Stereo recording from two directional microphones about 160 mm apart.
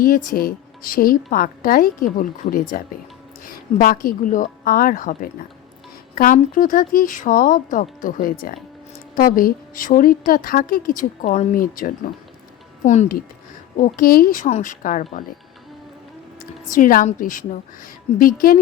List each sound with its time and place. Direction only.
0.0 s a woman's voice: 60° left (ahead or behind)
12.8 s a woman's voice: 50° left (ahead or behind)
16.4 s a woman's voice: 55° left (ahead or behind)